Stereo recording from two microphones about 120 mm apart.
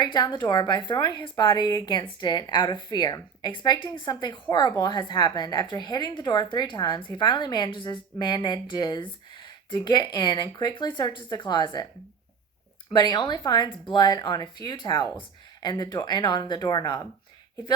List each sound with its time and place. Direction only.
0.0 s speech: 40° left (ahead or behind)
12.9 s speech: 35° left (ahead or behind)